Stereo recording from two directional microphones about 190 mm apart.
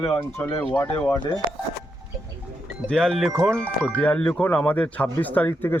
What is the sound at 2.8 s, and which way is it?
Speech, 5° left (ahead or behind).